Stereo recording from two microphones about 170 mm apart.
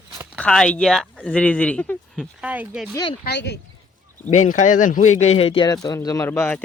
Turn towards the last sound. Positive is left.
turn(degrees=10)  # may be behind; listen again after turning